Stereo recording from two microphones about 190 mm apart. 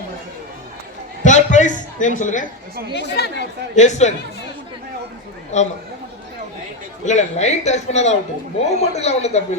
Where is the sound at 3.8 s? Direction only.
35° left (ahead or behind).